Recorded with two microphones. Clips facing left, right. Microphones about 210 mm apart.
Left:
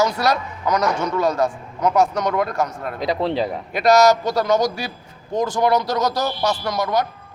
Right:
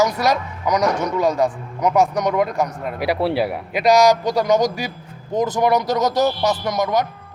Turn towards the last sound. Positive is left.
turn(degrees=-15)  # may be behind; listen again after turning